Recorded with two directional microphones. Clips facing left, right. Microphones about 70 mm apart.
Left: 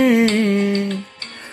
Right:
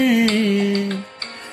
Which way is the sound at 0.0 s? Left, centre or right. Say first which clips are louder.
Left 2 dB; left.